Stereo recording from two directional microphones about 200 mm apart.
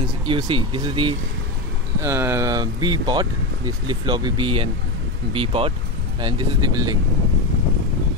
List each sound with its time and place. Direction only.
0.3 s speech: 25° right (ahead or behind)
2.0 s speech: 15° right (ahead or behind)